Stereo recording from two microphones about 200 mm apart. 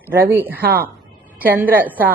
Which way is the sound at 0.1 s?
10° right (ahead or behind).